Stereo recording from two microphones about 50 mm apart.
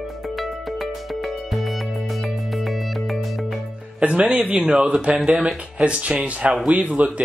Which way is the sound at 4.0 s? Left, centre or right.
Right.